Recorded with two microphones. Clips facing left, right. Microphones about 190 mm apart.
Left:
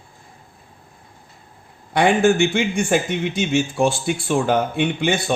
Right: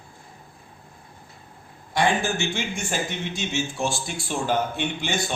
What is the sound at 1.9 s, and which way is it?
Speech, 60° left (ahead or behind).